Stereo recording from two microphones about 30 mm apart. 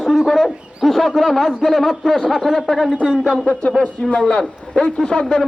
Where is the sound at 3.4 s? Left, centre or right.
Left.